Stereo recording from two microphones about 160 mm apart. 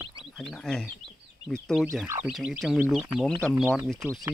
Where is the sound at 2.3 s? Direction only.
5° right (ahead or behind).